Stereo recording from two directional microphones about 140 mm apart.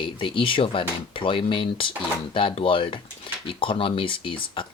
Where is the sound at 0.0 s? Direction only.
35° left (ahead or behind).